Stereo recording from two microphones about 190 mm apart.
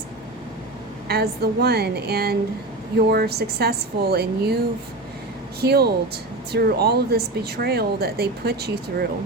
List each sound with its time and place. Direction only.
1.0 s speech: 55° right (ahead or behind)
5.5 s speech: 55° right (ahead or behind)